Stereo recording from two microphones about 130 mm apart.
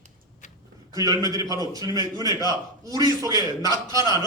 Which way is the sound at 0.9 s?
30° right (ahead or behind).